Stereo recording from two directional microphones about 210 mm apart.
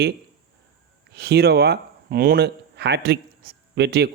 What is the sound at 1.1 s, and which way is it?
Speech, 50° right (ahead or behind).